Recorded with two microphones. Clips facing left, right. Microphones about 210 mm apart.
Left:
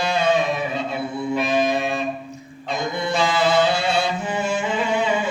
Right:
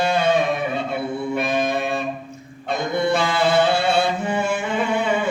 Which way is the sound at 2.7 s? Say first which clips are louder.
Right 3 dB; 60° right (ahead or behind).